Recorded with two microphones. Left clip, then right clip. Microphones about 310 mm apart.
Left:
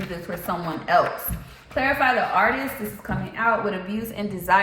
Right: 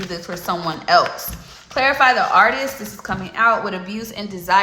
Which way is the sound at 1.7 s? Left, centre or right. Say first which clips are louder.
Right 6 dB; centre.